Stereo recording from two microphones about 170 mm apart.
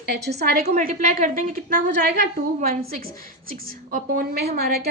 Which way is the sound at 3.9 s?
55° right (ahead or behind).